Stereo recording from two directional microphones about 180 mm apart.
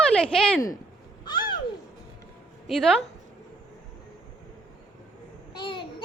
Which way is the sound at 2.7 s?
Centre (ahead or behind).